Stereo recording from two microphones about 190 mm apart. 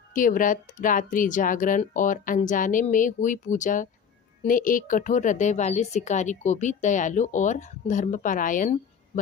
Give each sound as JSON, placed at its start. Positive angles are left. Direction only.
{"t": 0.1, "sound": "a woman's voice", "side_deg": 45}